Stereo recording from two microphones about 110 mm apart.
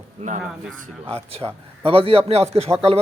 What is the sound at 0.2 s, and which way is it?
Speech, 85° right.